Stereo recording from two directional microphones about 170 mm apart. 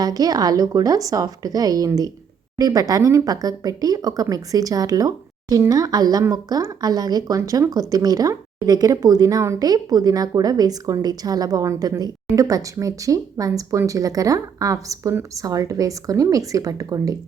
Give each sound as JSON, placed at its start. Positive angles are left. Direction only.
{"t": 0.0, "sound": "speech", "side_deg": -20}